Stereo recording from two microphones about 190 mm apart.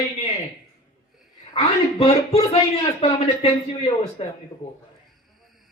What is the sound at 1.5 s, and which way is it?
A man's voice, 30° left (ahead or behind).